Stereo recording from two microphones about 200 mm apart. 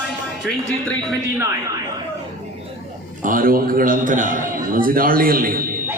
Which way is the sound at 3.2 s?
45° right (ahead or behind).